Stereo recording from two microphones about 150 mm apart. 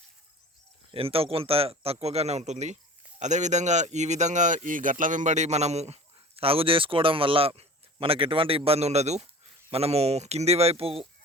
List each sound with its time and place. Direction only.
0.9 s speech: 40° right (ahead or behind)